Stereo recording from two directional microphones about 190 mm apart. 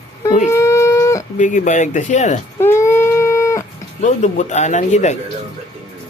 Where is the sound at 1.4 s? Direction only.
40° left (ahead or behind).